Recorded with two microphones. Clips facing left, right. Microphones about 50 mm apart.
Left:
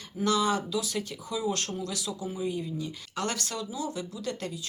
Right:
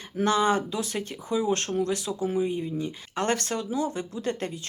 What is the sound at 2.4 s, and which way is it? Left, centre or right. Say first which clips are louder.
Speech: right 4 dB; right.